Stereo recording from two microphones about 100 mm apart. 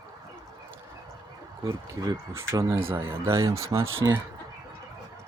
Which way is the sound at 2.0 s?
40° right (ahead or behind).